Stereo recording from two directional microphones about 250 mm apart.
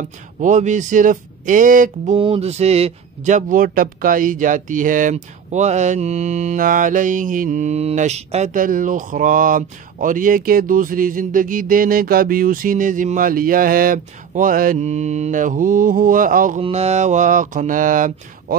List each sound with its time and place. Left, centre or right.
0.4 s speech: right